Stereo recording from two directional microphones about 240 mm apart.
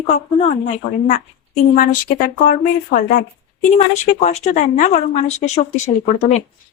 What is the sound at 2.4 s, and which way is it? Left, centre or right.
A woman's voice, left.